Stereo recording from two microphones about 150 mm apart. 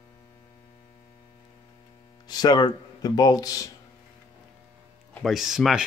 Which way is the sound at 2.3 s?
30° left (ahead or behind).